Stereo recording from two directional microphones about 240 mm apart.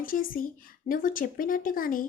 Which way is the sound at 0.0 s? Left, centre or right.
Left.